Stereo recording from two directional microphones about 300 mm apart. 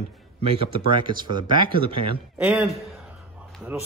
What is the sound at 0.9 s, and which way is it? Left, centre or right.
Speech, centre.